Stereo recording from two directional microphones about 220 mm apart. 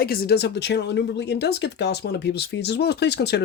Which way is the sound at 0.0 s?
45° left (ahead or behind).